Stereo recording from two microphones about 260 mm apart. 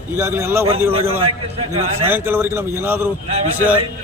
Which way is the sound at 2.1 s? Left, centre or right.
Centre.